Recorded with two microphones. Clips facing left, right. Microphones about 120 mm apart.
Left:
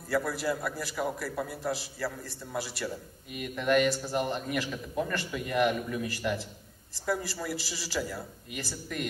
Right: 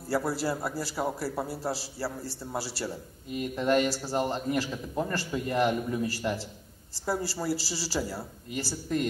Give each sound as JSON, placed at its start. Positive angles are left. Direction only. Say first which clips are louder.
{"t": 0.1, "sound": "a man's voice", "louder": "right 1 dB", "side_deg": -30}